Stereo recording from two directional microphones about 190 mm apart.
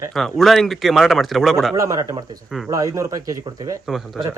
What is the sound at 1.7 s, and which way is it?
Speech, 15° right (ahead or behind).